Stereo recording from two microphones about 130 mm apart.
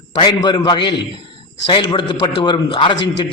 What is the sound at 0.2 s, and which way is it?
A man's voice, 35° left (ahead or behind).